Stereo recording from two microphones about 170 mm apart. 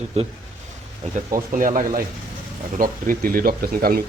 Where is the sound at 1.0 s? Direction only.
45° right (ahead or behind); by 4.0 s 60° right (ahead or behind).